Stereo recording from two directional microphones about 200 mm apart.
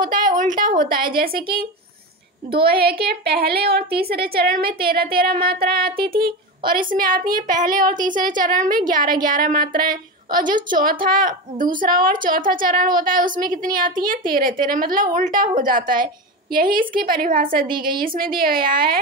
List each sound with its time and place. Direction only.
0.0 s a woman's voice: 40° right (ahead or behind)
2.7 s a woman's voice: 50° right (ahead or behind)